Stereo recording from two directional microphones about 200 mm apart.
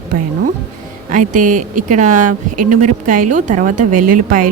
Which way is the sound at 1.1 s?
40° right (ahead or behind).